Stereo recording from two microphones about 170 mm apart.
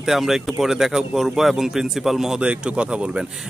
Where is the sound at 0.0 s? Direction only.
Centre (ahead or behind).